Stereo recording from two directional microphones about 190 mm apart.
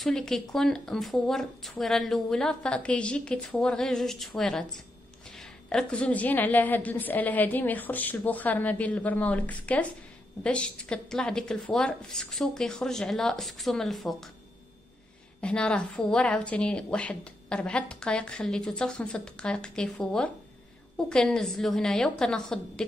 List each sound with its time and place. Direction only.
0.0 s a woman's voice: 5° left (ahead or behind)
15.4 s speech: 5° left (ahead or behind)